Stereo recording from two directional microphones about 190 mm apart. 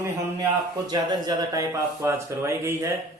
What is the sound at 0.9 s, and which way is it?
Speech, 20° right (ahead or behind).